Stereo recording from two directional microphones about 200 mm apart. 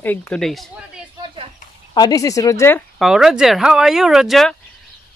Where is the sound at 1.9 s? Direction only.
20° left (ahead or behind).